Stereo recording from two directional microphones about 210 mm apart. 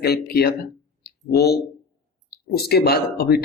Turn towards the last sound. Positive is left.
turn(degrees=50)  # may be behind; listen again after turning